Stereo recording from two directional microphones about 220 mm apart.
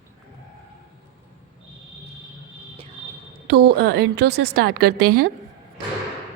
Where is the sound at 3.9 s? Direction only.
50° right (ahead or behind).